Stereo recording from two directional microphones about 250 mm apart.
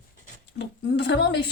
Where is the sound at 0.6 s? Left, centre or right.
Left.